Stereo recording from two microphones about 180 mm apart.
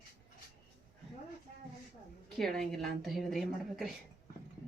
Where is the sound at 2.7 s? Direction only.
Centre (ahead or behind).